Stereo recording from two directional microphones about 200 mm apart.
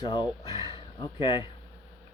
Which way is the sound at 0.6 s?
25° left (ahead or behind).